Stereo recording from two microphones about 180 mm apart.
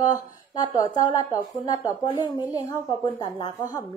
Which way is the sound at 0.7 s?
20° left (ahead or behind).